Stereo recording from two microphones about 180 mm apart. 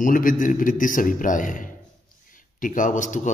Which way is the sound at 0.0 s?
50° left (ahead or behind).